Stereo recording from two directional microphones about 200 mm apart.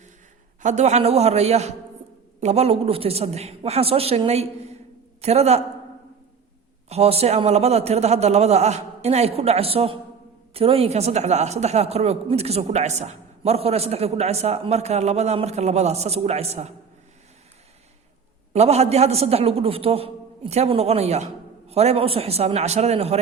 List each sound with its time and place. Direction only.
0.6 s a man's voice: 35° right (ahead or behind)
6.8 s a man's voice: 30° right (ahead or behind)
18.5 s a man's voice: 30° right (ahead or behind)